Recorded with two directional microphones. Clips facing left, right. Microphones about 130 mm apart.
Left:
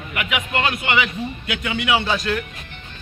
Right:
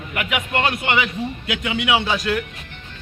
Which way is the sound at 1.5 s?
15° right (ahead or behind).